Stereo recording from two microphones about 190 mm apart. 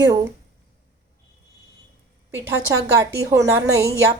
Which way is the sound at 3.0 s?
15° right (ahead or behind).